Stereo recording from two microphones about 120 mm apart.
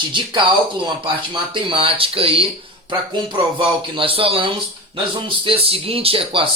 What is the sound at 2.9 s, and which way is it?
A man's voice, 40° right (ahead or behind).